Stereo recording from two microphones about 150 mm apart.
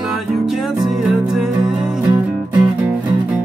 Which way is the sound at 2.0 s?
25° right (ahead or behind).